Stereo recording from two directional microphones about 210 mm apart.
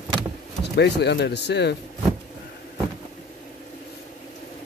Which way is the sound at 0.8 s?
55° left (ahead or behind).